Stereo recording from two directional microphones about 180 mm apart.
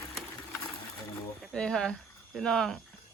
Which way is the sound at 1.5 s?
5° left (ahead or behind).